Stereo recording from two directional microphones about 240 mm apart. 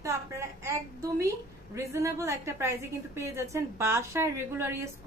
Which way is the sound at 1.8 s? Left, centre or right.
Centre.